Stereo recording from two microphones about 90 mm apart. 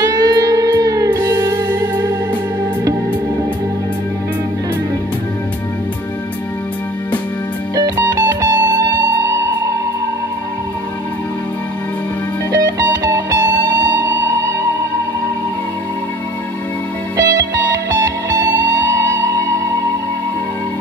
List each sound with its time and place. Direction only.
0.0 s music: 45° right (ahead or behind); by 2.0 s 30° right (ahead or behind)
7.7 s music: 40° right (ahead or behind)
12.5 s music: 40° right (ahead or behind)
17.2 s music: 40° right (ahead or behind)